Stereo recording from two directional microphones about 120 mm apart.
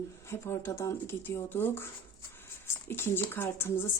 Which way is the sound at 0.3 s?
25° left (ahead or behind).